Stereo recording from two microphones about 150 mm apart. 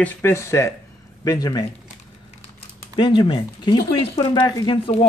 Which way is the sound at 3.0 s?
35° left (ahead or behind).